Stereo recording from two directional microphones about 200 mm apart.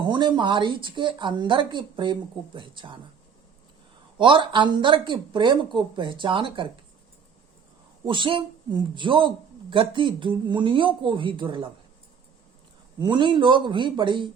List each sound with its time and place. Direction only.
0.0 s a woman's voice: 25° right (ahead or behind)
4.2 s a woman's voice: 25° right (ahead or behind)
8.0 s a woman's voice: 25° right (ahead or behind)
13.0 s a woman's voice: 25° right (ahead or behind)